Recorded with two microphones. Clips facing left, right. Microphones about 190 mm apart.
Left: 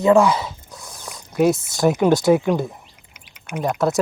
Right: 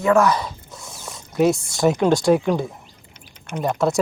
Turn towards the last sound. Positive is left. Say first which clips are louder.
# even
turn(degrees=0)  # may be behind; listen again after turning